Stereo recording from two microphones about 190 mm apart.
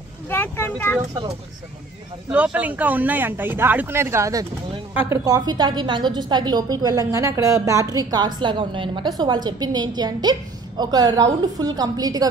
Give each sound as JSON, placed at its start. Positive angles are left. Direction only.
{"t": 0.3, "sound": "speech", "side_deg": 10}
{"t": 2.3, "sound": "a woman's voice", "side_deg": -10}